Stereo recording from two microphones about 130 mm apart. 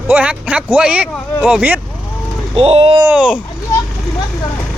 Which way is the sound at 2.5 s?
50° right (ahead or behind).